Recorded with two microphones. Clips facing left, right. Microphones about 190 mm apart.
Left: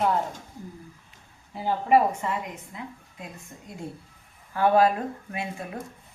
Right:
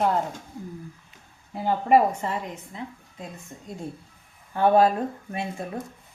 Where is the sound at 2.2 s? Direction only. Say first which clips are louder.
Right 1 dB; 30° right (ahead or behind).